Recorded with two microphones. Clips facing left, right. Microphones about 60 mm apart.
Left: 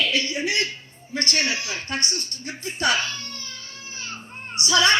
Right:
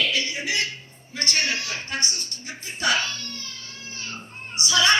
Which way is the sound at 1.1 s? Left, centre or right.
Left.